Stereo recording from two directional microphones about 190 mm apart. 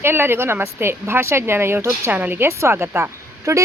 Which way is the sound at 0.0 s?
10° right (ahead or behind).